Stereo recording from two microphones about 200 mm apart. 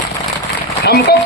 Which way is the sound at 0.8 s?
55° left (ahead or behind).